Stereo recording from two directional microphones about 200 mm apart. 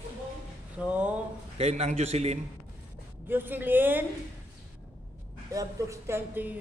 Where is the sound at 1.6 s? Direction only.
30° right (ahead or behind).